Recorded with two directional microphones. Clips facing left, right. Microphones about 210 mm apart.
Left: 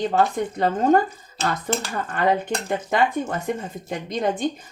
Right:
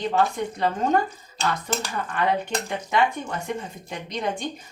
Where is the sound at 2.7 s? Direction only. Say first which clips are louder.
Left 2 dB; 50° left (ahead or behind).